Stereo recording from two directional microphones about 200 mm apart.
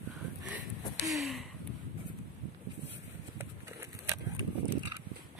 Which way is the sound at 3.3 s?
15° right (ahead or behind).